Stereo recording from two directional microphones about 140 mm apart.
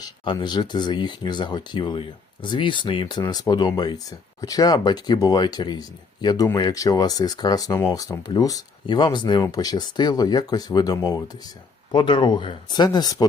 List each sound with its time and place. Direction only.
0.0 s speech: 30° left (ahead or behind)